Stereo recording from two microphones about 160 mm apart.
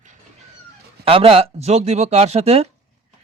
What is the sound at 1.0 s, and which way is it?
Speech, 35° right (ahead or behind).